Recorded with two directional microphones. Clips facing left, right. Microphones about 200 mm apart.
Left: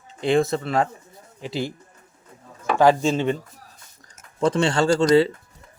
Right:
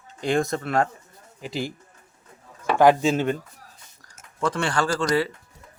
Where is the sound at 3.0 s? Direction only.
Centre (ahead or behind).